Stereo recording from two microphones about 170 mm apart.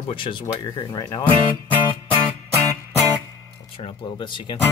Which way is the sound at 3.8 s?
30° left (ahead or behind).